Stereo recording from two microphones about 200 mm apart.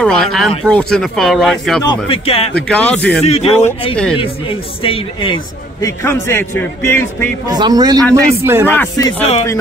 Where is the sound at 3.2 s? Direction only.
30° left (ahead or behind); by 7.2 s 10° left (ahead or behind).